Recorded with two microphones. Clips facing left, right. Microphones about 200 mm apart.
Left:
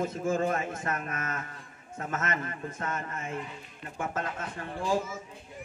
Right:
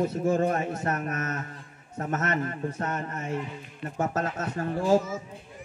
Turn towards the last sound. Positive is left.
turn(degrees=-45)  # may be behind; listen again after turning